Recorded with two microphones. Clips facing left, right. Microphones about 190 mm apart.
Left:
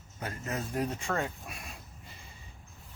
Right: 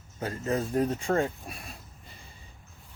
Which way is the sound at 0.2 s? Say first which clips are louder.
Right 7 dB; 30° right (ahead or behind).